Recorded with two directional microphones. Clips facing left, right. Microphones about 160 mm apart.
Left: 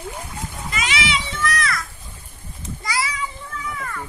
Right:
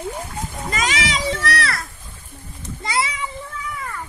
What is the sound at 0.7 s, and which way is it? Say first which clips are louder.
Children playing: right 2 dB; 40° right (ahead or behind).